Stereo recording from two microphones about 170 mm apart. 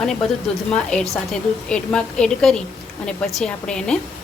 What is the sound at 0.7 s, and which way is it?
A woman's voice, 5° left (ahead or behind).